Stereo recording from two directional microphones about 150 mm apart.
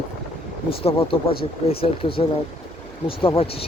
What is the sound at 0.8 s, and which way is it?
Speech, 40° left (ahead or behind).